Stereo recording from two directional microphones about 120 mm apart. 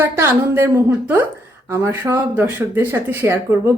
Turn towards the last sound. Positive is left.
turn(degrees=-20)  # may be behind; listen again after turning